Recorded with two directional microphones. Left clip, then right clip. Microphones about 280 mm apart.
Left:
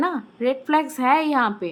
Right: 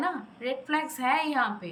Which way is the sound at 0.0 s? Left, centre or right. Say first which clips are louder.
Left 8 dB; centre.